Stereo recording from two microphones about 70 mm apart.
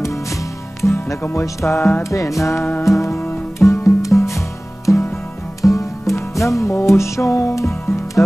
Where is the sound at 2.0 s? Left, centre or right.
Left.